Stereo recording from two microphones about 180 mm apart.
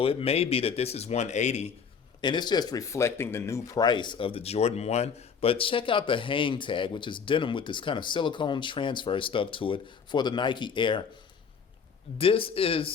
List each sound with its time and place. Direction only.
0.0 s speech: 30° left (ahead or behind)
2.2 s speech: 25° left (ahead or behind)
12.1 s speech: 30° left (ahead or behind)